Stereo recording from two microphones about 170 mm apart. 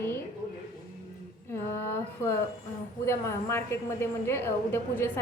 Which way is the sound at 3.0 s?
15° left (ahead or behind).